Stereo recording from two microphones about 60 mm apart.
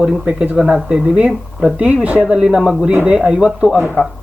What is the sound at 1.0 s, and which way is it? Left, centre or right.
Speech, right.